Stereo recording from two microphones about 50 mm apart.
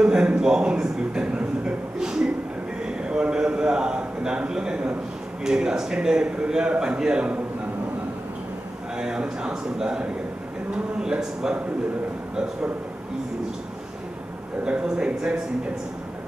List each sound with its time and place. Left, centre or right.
0.0 s music: centre
2.8 s a sound: centre
5.4 s a man's voice: centre
8.9 s a man's voice: centre
14.6 s a man's voice: centre